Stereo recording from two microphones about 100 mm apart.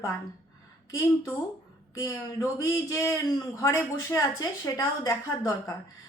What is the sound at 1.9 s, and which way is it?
Speech, 30° left (ahead or behind).